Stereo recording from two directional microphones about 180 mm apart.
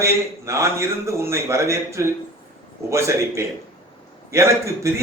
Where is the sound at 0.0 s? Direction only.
15° right (ahead or behind).